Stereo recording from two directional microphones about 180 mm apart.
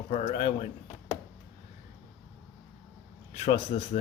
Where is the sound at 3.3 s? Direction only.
35° left (ahead or behind).